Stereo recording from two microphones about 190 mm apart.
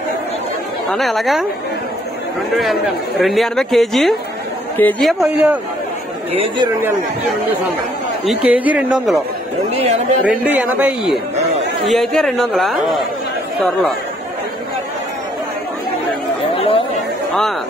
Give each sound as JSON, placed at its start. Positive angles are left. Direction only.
{"t": 0.8, "sound": "speech", "side_deg": 0}
{"t": 2.5, "sound": "a woman's voice", "side_deg": 0}
{"t": 5.2, "sound": "speech", "side_deg": -5}
{"t": 8.3, "sound": "speech", "side_deg": -5}
{"t": 9.8, "sound": "speech", "side_deg": -35}
{"t": 10.6, "sound": "speech", "side_deg": -5}
{"t": 16.5, "sound": "chatter", "side_deg": 30}